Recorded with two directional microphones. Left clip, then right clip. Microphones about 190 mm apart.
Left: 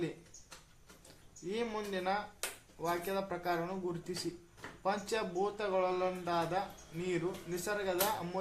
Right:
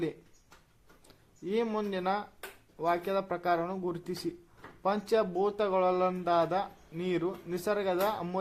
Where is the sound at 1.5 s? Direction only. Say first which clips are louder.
Right 6 dB; 35° right (ahead or behind).